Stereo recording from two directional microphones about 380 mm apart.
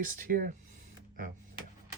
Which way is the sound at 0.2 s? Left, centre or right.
Right.